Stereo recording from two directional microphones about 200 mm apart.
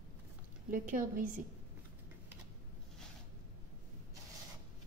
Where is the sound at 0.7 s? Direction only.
40° right (ahead or behind).